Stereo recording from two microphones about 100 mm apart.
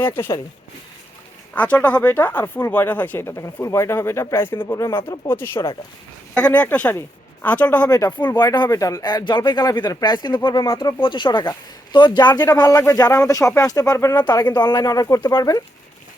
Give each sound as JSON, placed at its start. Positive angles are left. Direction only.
{"t": 0.0, "sound": "speech", "side_deg": 20}
{"t": 1.5, "sound": "speech", "side_deg": 15}
{"t": 7.9, "sound": "speech", "side_deg": 40}
{"t": 11.0, "sound": "speech", "side_deg": 55}
{"t": 14.2, "sound": "speech", "side_deg": 50}
{"t": 15.2, "sound": "speech", "side_deg": 50}